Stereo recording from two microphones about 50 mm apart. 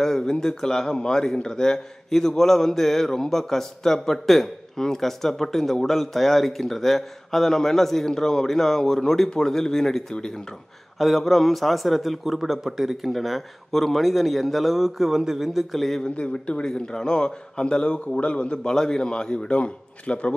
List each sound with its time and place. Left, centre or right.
0.0 s a man's voice: centre
16.0 s a man's voice: left